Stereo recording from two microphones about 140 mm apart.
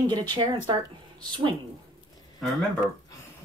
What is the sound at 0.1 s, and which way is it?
Speech, 30° right (ahead or behind).